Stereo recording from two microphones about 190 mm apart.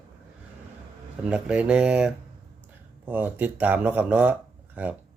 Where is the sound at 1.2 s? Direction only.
5° right (ahead or behind).